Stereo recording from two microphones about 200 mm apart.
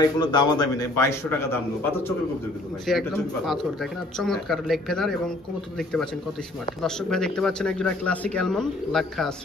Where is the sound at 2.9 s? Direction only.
Centre (ahead or behind).